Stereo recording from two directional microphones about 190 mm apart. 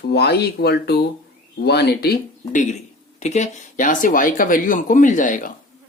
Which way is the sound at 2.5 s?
40° left (ahead or behind).